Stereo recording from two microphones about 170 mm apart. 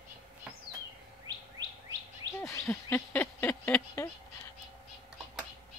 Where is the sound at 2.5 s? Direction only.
15° left (ahead or behind).